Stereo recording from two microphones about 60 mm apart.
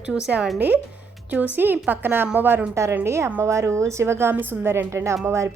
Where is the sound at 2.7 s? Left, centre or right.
Right.